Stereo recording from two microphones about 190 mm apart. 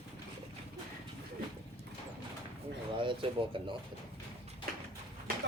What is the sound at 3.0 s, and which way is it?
Speech, 25° right (ahead or behind).